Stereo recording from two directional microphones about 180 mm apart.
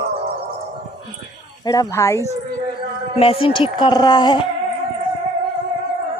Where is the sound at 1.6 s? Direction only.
20° left (ahead or behind).